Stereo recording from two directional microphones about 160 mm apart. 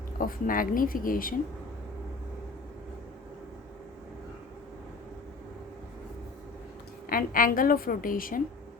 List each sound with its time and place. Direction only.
0.2 s a woman's voice: 60° left (ahead or behind)
7.1 s a woman's voice: 60° left (ahead or behind)